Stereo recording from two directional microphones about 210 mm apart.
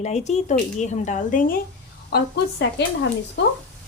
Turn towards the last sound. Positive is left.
turn(degrees=60)  # may be behind; listen again after turning